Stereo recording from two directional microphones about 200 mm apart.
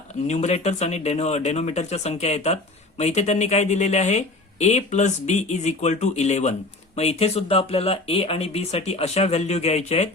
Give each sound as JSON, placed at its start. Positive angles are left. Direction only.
{"t": 0.3, "sound": "speech", "side_deg": 35}